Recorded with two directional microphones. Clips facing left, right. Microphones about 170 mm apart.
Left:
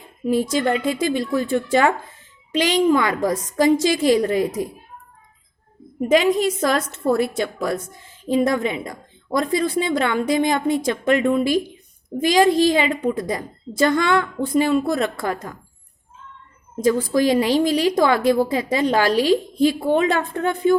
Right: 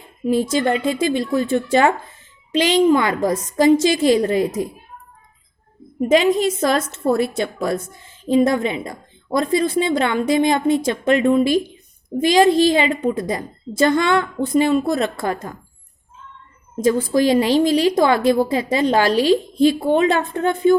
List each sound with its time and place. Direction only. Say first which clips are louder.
0.3 s a woman's voice: right 1 dB; 25° right (ahead or behind)
6.1 s a woman's voice: right 1 dB; 25° right (ahead or behind)
16.8 s a woman's voice: right 1 dB; 25° right (ahead or behind)